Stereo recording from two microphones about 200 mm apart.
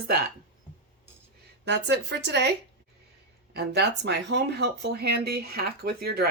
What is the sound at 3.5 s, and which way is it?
Speech, 50° right (ahead or behind).